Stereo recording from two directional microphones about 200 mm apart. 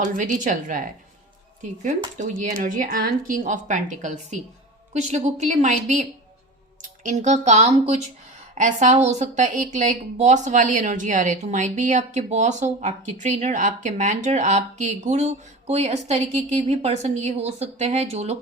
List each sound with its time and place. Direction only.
0.0 s speech: 40° right (ahead or behind)
2.1 s speech: 35° right (ahead or behind)
7.0 s speech: 40° right (ahead or behind)